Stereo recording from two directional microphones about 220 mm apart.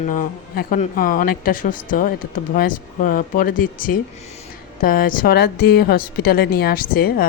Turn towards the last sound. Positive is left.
turn(degrees=40)  # may be behind; listen again after turning